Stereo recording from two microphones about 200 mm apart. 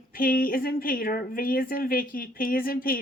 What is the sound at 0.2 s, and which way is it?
A woman's voice, 45° left (ahead or behind).